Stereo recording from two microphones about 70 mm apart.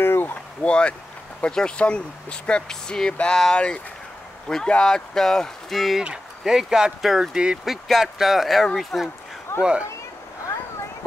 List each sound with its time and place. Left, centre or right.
0.0 s a sound: left
0.7 s speech: centre
9.6 s speech: centre